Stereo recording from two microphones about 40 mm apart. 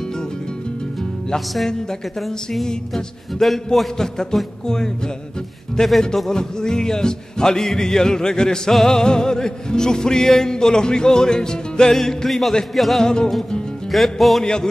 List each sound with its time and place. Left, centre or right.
1.7 s music: centre
4.3 s music: centre
13.0 s music: centre
13.9 s music: centre
14.4 s music: centre